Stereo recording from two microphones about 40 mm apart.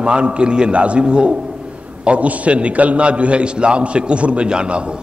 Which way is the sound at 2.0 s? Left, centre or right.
Right.